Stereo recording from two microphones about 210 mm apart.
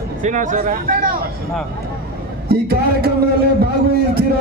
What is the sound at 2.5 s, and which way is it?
Speech, 45° right (ahead or behind).